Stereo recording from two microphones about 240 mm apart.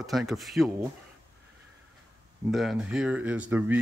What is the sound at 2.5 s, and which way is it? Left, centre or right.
Speech, centre.